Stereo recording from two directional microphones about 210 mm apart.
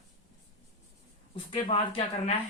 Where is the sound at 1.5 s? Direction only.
25° left (ahead or behind).